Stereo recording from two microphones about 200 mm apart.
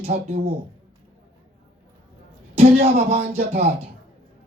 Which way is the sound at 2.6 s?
30° right (ahead or behind).